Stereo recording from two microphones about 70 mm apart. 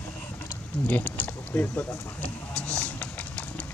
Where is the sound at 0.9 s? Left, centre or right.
Left.